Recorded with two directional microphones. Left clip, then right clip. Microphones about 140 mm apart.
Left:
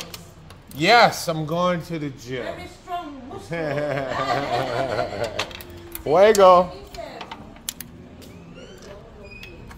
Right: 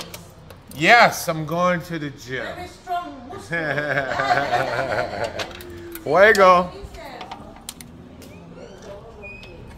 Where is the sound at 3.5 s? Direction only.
20° left (ahead or behind).